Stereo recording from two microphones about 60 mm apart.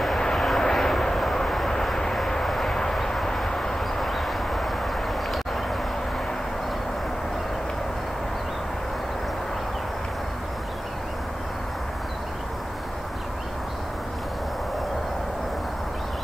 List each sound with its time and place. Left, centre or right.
0.0 s vehicle: centre